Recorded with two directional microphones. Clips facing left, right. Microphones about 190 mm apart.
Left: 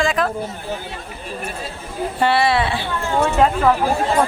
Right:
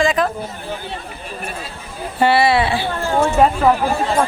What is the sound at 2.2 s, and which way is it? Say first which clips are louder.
Speech: right 3 dB; 5° right (ahead or behind).